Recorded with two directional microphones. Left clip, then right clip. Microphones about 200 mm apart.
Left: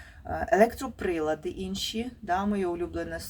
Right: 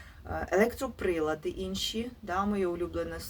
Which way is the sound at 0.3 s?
10° left (ahead or behind).